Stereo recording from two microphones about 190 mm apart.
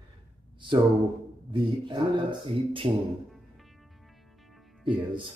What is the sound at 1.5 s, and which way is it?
A man's voice, 25° right (ahead or behind).